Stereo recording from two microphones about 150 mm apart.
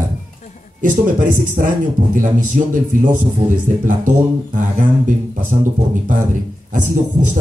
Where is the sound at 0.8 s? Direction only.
60° right (ahead or behind).